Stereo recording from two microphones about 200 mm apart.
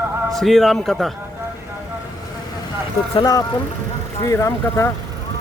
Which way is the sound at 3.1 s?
20° left (ahead or behind).